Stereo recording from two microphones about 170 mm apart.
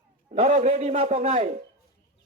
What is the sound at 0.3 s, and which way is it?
Speech, 40° right (ahead or behind).